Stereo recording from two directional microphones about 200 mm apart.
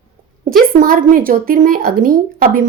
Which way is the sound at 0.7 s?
45° right (ahead or behind).